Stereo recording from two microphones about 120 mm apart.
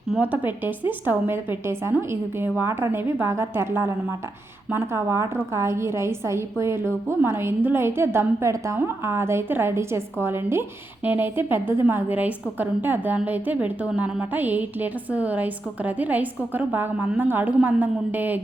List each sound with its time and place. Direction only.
0.1 s a woman's voice: 15° right (ahead or behind)